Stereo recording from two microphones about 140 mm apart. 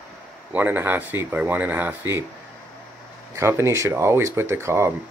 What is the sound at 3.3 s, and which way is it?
Speech, 20° right (ahead or behind).